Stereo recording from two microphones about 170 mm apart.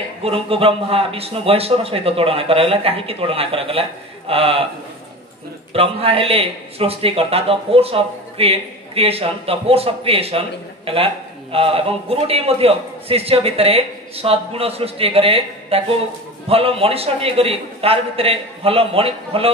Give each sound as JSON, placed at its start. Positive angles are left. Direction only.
{"t": 0.2, "sound": "a man's voice", "side_deg": -35}
{"t": 5.7, "sound": "a man's voice", "side_deg": -35}
{"t": 11.5, "sound": "a man's voice", "side_deg": -35}